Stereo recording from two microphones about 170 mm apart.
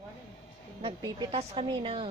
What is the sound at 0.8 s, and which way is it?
A woman's voice, 35° right (ahead or behind).